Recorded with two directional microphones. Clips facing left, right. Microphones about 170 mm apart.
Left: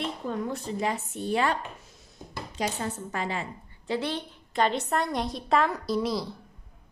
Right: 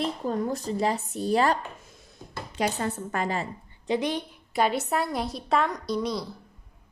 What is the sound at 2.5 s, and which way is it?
Speech, 60° right (ahead or behind).